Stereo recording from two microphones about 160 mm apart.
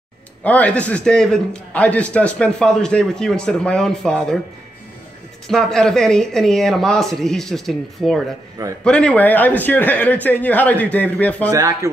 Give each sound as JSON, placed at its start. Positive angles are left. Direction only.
{"t": 0.4, "sound": "a man's voice", "side_deg": 10}
{"t": 5.5, "sound": "a man's voice", "side_deg": 5}
{"t": 11.5, "sound": "speech", "side_deg": -20}